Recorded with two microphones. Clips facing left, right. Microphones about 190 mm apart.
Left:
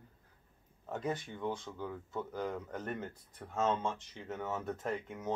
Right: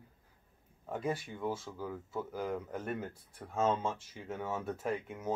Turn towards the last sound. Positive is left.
turn(degrees=-10)  # may be behind; listen again after turning